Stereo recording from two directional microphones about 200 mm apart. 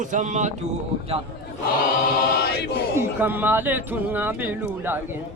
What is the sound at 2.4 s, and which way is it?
Chant, 50° left (ahead or behind).